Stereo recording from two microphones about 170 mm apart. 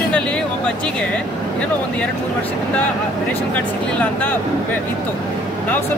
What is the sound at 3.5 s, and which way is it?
Speech, 10° left (ahead or behind).